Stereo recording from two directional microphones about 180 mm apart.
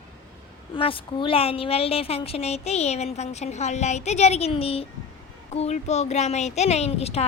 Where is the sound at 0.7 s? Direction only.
30° left (ahead or behind).